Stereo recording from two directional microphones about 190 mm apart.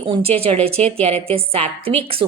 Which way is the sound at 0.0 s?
30° right (ahead or behind).